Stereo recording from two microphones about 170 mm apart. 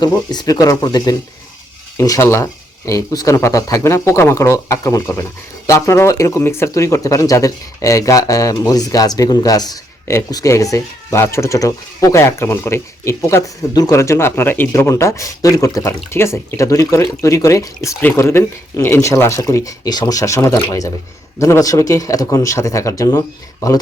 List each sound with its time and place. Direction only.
0.0 s speech: 25° left (ahead or behind)